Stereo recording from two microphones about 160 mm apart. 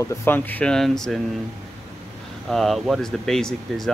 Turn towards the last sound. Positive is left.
turn(degrees=0)  # may be behind; listen again after turning